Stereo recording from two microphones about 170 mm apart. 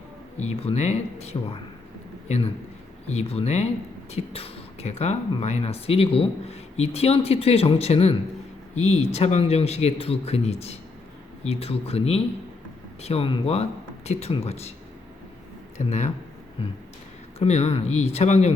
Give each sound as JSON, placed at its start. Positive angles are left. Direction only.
{"t": 0.3, "sound": "speech", "side_deg": 40}
{"t": 15.9, "sound": "speech", "side_deg": 45}
{"t": 17.4, "sound": "speech", "side_deg": 40}